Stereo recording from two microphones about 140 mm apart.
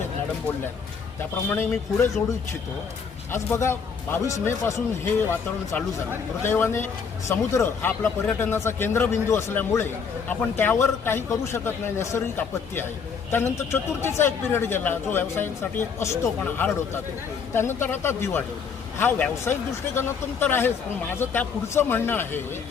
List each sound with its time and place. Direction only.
1.5 s speech: 15° left (ahead or behind)
6.4 s speech: 15° left (ahead or behind)